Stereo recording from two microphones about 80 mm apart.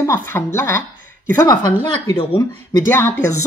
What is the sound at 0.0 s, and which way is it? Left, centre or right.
Speech, left.